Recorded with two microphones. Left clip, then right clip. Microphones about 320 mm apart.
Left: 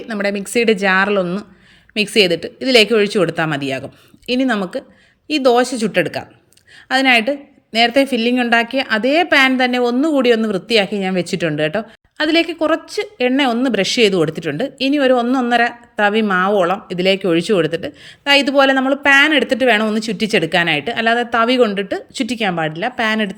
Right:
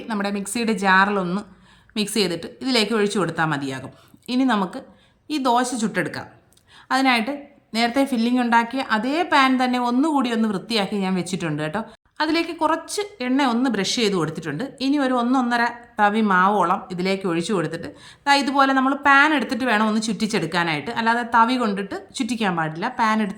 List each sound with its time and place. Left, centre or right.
0.1 s a woman's voice: centre